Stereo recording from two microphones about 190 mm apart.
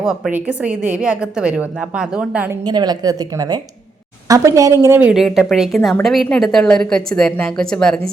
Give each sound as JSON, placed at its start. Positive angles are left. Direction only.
{"t": 0.0, "sound": "a woman's voice", "side_deg": -5}
{"t": 2.6, "sound": "a woman's voice", "side_deg": -20}